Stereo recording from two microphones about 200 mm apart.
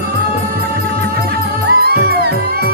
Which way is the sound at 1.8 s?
55° right (ahead or behind).